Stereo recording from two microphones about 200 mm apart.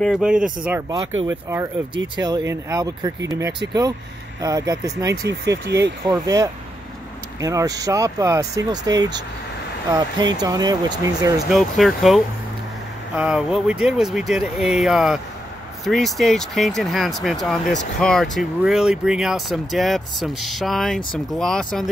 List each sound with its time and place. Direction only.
0.0 s speech: centre (ahead or behind)
2.1 s speech: 20° right (ahead or behind)
4.4 s speech: 20° right (ahead or behind)
11.5 s speech: centre (ahead or behind)